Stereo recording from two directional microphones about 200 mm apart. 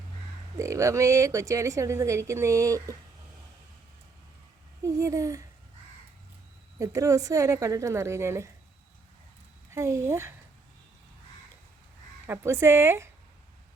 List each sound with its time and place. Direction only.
0.5 s a woman's voice: 15° right (ahead or behind)
4.8 s a woman's voice: 15° right (ahead or behind)
6.7 s a woman's voice: 15° right (ahead or behind)
9.7 s a woman's voice: 15° right (ahead or behind)
12.2 s a woman's voice: 10° right (ahead or behind)